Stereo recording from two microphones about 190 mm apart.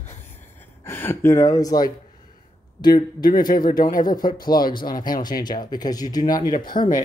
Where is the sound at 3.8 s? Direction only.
45° left (ahead or behind).